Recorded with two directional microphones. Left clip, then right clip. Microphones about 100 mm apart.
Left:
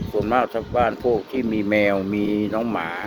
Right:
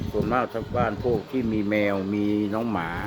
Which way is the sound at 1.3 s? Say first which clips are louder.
Left 4 dB; 35° left (ahead or behind).